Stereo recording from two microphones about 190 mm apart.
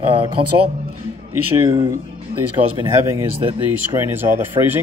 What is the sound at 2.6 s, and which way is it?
Speech, 45° right (ahead or behind).